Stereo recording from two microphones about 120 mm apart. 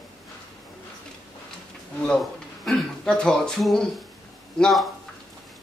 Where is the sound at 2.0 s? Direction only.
5° left (ahead or behind).